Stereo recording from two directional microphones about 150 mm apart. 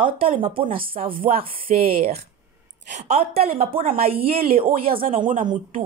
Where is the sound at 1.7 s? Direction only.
55° right (ahead or behind).